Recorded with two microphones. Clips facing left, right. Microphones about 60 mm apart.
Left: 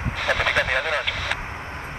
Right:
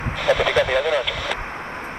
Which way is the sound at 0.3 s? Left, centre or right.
Centre.